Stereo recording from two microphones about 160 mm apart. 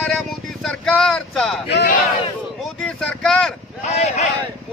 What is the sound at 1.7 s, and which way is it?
Speech, 90° left.